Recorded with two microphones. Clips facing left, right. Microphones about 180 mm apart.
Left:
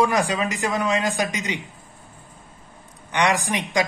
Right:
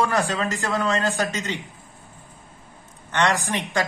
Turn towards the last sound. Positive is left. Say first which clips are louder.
# left 2 dB
turn(degrees=15)  # may be behind; listen again after turning